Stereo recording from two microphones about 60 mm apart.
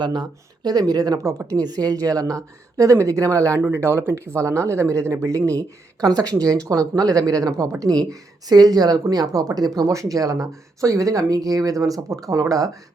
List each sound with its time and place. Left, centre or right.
0.7 s speech: right
3.6 s speech: right
5.2 s speech: right
7.8 s speech: right